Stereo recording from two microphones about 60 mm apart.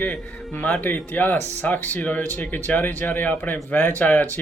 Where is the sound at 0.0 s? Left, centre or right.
Left.